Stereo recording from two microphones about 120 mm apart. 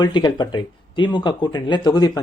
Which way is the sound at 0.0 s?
40° left (ahead or behind).